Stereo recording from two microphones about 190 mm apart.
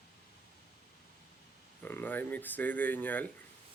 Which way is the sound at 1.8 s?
10° left (ahead or behind).